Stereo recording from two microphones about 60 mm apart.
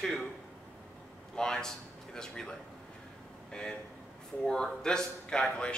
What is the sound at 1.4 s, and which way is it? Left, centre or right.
A man's voice, centre.